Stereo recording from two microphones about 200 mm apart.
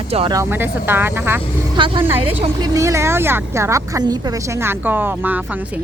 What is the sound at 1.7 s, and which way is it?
Speech, 25° right (ahead or behind).